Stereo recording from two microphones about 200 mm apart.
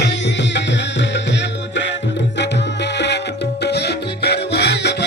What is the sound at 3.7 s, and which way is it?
Music, 55° left (ahead or behind).